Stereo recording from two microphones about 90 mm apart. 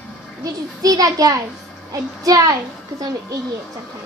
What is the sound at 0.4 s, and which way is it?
A child's voice, 40° right (ahead or behind).